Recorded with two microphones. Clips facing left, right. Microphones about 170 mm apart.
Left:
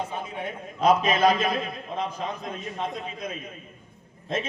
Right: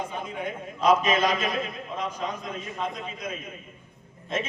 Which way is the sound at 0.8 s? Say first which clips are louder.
Left 1 dB; 55° left (ahead or behind).